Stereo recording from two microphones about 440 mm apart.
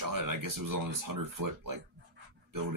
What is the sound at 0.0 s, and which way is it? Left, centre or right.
Speech, right.